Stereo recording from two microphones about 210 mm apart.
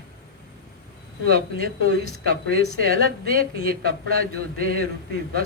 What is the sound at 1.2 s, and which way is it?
Speech, 45° right (ahead or behind).